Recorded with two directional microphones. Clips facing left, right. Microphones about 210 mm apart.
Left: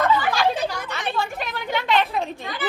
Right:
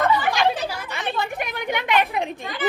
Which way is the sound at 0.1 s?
10° right (ahead or behind).